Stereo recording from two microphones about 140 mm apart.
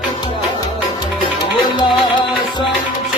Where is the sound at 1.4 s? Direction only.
30° left (ahead or behind).